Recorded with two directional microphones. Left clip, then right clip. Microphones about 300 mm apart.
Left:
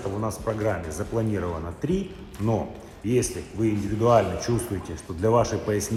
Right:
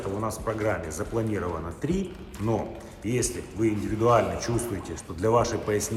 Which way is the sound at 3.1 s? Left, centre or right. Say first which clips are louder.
Left 4 dB; left.